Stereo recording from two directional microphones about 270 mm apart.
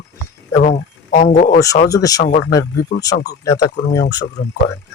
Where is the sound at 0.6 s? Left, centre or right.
Left.